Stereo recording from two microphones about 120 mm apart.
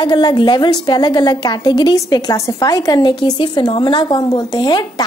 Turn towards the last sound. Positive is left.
turn(degrees=35)  # may be behind; listen again after turning